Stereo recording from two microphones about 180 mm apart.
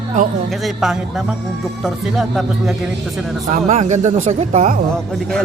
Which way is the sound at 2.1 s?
Centre (ahead or behind).